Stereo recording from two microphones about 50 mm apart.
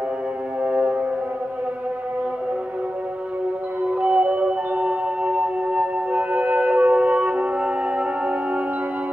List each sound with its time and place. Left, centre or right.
0.7 s music: right
3.8 s music: right